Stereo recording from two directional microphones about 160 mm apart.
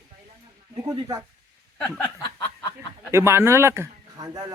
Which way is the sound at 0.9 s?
20° right (ahead or behind).